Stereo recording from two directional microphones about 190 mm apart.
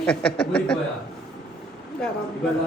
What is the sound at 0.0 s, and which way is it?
Speech, 5° left (ahead or behind).